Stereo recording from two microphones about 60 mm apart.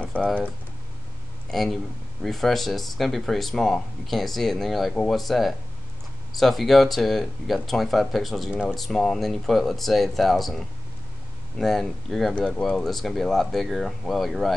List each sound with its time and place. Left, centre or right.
0.0 s speech: centre
1.5 s speech: centre
12.4 s speech: centre
12.6 s speech: centre